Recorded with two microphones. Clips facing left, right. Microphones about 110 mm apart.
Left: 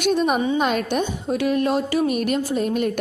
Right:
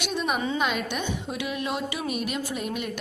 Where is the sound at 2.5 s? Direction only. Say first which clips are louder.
Left 9 dB; 40° left (ahead or behind).